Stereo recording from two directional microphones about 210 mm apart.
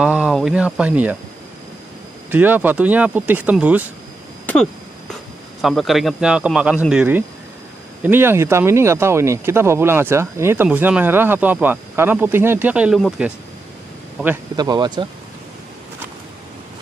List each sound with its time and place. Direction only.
0.0 s speech: 5° right (ahead or behind)
2.3 s speech: 10° right (ahead or behind)
5.6 s a man's voice: centre (ahead or behind)
14.2 s speech: 15° right (ahead or behind)